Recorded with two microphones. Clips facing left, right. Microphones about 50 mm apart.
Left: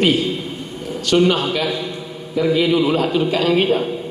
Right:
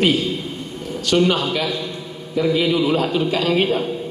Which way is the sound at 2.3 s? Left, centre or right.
Centre.